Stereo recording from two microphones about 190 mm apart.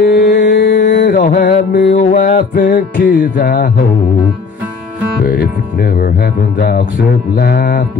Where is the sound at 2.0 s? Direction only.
40° left (ahead or behind).